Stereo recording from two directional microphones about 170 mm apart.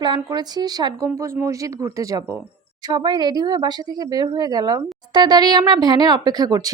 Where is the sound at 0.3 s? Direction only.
25° right (ahead or behind).